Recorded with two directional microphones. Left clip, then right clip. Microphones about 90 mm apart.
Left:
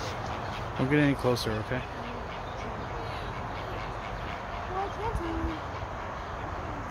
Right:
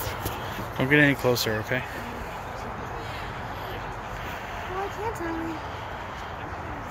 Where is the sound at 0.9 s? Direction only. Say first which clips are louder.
Right 6 dB; 5° left (ahead or behind).